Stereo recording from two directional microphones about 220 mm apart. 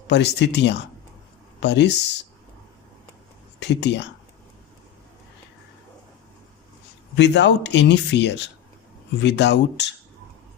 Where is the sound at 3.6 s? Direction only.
50° left (ahead or behind).